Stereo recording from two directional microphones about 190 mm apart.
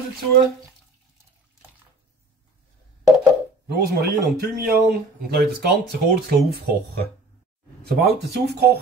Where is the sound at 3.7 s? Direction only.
55° right (ahead or behind).